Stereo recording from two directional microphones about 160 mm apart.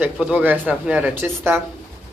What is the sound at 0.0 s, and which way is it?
Speech, 10° right (ahead or behind).